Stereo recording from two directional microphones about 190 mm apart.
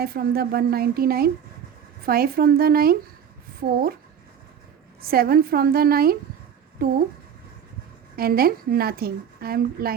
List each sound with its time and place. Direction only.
0.0 s a woman's voice: 55° right (ahead or behind)
5.0 s a woman's voice: 50° right (ahead or behind)
8.1 s a woman's voice: 50° right (ahead or behind)